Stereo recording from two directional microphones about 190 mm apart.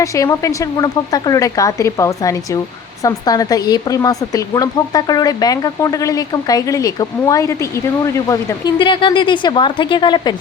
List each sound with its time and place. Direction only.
0.0 s speech: 15° left (ahead or behind)